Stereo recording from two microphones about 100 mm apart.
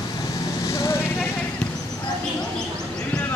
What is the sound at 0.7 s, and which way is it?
Vehicle, 30° left (ahead or behind).